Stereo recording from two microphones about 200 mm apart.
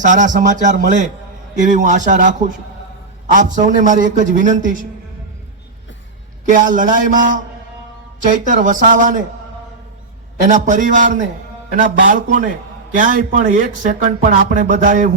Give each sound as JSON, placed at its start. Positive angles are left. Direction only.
{"t": 0.0, "sound": "speech", "side_deg": -40}
{"t": 6.5, "sound": "speech", "side_deg": -40}
{"t": 10.4, "sound": "speech", "side_deg": -40}